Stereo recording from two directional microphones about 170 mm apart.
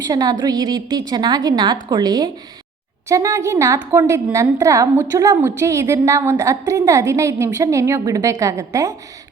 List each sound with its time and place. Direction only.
0.0 s a woman's voice: 20° right (ahead or behind)